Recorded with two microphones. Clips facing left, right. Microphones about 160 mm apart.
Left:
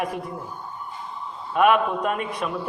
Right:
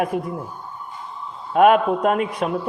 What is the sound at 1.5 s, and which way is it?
Speech, 55° right (ahead or behind).